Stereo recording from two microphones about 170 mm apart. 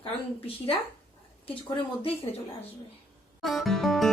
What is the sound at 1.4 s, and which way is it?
Speech, 30° left (ahead or behind).